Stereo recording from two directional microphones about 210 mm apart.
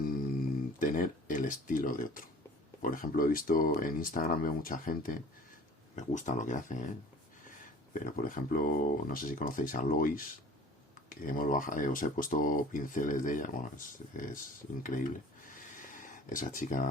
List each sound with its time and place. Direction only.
0.8 s speech: 40° left (ahead or behind)
7.9 s speech: 40° left (ahead or behind)
14.8 s a sound: 40° left (ahead or behind)